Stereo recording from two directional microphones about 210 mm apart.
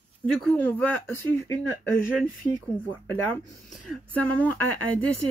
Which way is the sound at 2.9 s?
10° left (ahead or behind).